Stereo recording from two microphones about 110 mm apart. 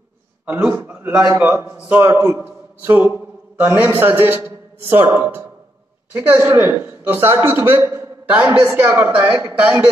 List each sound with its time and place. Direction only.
0.5 s a man's voice: 15° right (ahead or behind)